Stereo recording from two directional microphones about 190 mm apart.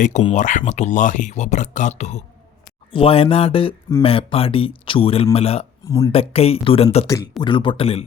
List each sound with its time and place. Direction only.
0.0 s speech: 35° left (ahead or behind)